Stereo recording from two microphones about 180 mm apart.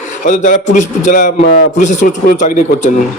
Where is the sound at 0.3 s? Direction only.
45° left (ahead or behind).